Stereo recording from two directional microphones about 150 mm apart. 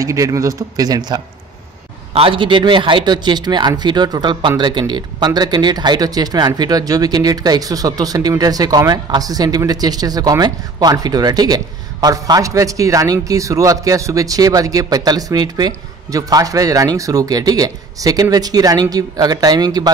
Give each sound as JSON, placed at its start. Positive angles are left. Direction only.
{"t": 0.0, "sound": "a man's voice", "side_deg": -20}